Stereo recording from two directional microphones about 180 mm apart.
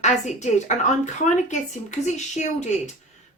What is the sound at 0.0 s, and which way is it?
Speech, 40° left (ahead or behind).